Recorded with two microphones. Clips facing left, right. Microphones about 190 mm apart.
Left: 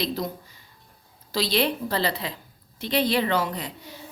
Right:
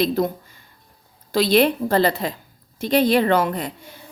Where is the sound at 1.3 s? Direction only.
55° right (ahead or behind).